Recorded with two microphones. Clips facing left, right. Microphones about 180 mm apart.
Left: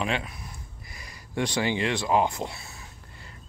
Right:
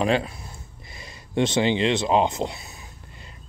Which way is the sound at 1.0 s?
25° right (ahead or behind).